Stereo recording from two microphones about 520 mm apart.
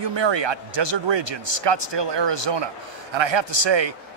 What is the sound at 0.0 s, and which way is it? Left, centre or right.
A man's voice, right.